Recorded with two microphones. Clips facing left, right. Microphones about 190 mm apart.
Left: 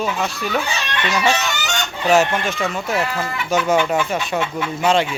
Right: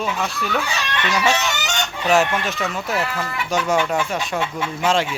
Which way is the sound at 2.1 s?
Centre (ahead or behind).